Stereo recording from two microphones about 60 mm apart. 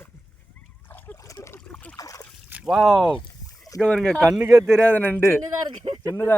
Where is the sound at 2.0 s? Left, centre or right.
Left.